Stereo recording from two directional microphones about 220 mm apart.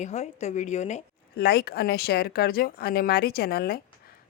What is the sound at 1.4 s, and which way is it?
Speech, 45° left (ahead or behind).